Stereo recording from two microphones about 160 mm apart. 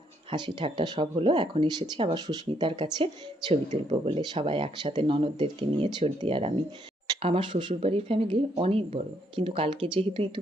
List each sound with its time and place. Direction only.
0.3 s speech: 30° right (ahead or behind)
3.5 s speech: 40° right (ahead or behind)